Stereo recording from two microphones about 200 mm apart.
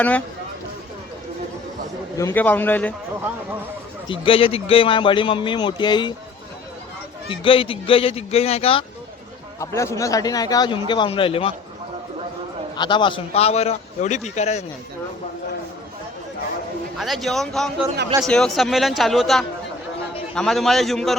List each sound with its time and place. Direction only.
2.1 s a man's voice: 10° left (ahead or behind)
4.1 s a man's voice: 25° left (ahead or behind)
7.3 s a man's voice: 25° left (ahead or behind)
9.6 s a man's voice: 15° left (ahead or behind)
12.7 s a man's voice: 20° left (ahead or behind)
17.0 s speech: centre (ahead or behind)